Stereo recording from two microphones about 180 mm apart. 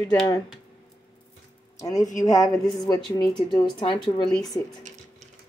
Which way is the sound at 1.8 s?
20° left (ahead or behind).